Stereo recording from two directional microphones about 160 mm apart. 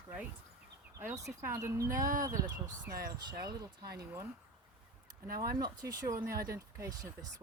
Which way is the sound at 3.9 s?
20° right (ahead or behind).